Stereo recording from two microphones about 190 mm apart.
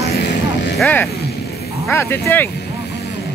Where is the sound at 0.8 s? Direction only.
10° left (ahead or behind).